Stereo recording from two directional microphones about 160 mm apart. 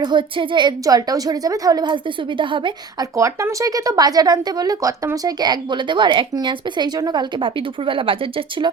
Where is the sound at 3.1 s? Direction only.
20° right (ahead or behind).